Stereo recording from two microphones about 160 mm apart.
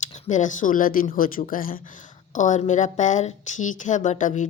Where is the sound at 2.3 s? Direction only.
50° left (ahead or behind).